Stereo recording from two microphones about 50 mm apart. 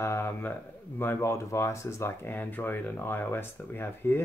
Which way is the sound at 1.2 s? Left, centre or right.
Left.